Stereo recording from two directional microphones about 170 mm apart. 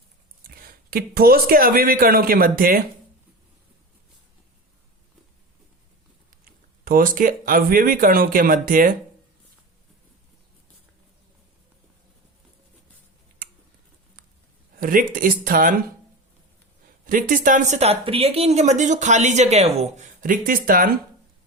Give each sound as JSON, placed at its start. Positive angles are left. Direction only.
{"t": 0.4, "sound": "speech", "side_deg": -60}
{"t": 6.4, "sound": "speech", "side_deg": -55}
{"t": 13.4, "sound": "a sound", "side_deg": -55}
{"t": 14.8, "sound": "speech", "side_deg": -55}
{"t": 17.1, "sound": "speech", "side_deg": -50}
{"t": 20.2, "sound": "speech", "side_deg": -55}